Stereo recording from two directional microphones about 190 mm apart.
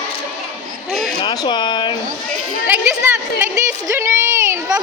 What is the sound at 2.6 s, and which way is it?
Speech, 10° right (ahead or behind).